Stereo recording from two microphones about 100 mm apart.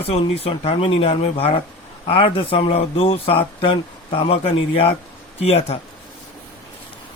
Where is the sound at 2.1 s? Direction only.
60° left (ahead or behind).